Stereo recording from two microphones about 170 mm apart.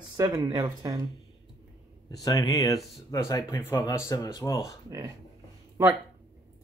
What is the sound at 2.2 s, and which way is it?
Speech, 20° left (ahead or behind).